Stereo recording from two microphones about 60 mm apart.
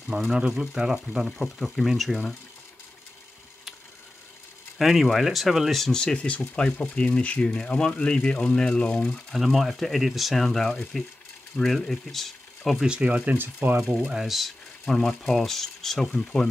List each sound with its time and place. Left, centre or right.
0.1 s speech: right
0.5 s speech: centre
4.7 s speech: centre
9.3 s speech: centre
12.8 s speech: centre
13.9 s speech: centre